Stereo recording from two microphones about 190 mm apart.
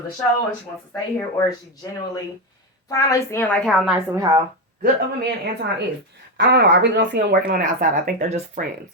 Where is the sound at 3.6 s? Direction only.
Centre (ahead or behind).